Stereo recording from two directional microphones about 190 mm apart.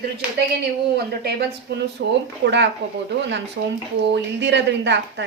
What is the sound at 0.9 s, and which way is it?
A woman's voice, 55° right (ahead or behind).